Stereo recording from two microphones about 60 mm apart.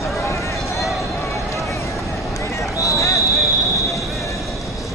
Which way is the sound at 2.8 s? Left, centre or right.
Left.